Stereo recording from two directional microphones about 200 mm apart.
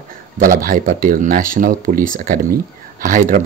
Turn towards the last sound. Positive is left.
turn(degrees=-40)  # may be behind; listen again after turning